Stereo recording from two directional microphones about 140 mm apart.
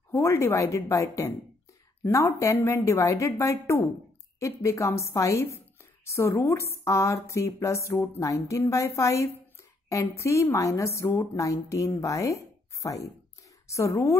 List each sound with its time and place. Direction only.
0.1 s a woman's voice: 20° left (ahead or behind)